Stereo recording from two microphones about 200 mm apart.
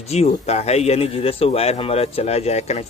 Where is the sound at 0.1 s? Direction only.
30° left (ahead or behind).